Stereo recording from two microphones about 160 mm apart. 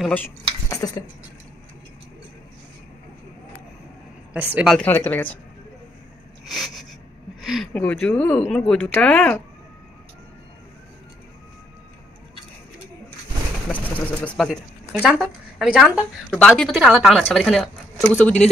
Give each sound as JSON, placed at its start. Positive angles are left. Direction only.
{"t": 0.7, "sound": "a sound", "side_deg": 20}
{"t": 4.3, "sound": "speech", "side_deg": -10}
{"t": 4.7, "sound": "speech", "side_deg": 10}
{"t": 6.4, "sound": "a sound", "side_deg": 0}
{"t": 7.4, "sound": "speech", "side_deg": 0}
{"t": 7.7, "sound": "speech", "side_deg": 10}
{"t": 13.7, "sound": "bird", "side_deg": 10}
{"t": 15.0, "sound": "speech", "side_deg": -5}